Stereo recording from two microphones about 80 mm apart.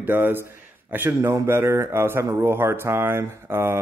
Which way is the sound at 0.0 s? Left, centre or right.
Right.